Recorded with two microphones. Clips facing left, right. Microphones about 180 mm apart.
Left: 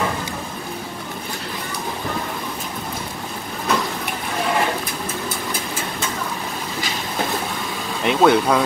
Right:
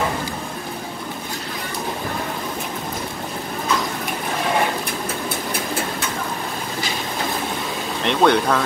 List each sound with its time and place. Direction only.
8.0 s speech: 5° left (ahead or behind)